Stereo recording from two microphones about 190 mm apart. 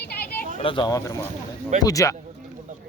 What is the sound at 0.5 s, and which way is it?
Speech, 25° left (ahead or behind).